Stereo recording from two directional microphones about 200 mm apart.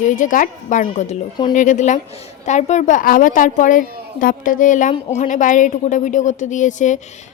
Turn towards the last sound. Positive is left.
turn(degrees=40)  # may be behind; listen again after turning